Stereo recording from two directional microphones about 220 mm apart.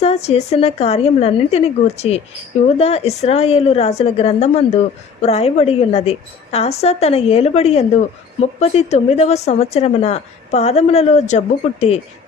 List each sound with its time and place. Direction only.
0.0 s a woman's voice: 30° left (ahead or behind)